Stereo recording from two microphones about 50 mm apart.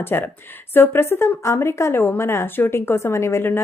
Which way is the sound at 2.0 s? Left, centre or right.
Left.